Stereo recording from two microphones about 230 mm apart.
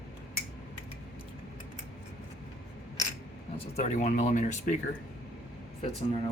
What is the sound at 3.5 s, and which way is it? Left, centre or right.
Speech, left.